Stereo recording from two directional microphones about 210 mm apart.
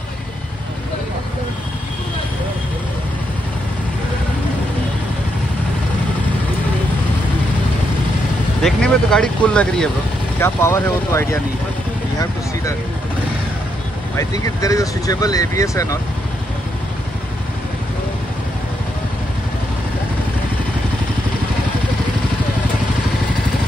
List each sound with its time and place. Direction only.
8.6 s speech: 5° left (ahead or behind)
14.1 s speech: 15° left (ahead or behind)